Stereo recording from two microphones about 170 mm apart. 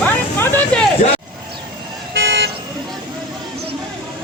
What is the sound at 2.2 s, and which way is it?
Vehicle, 90° right.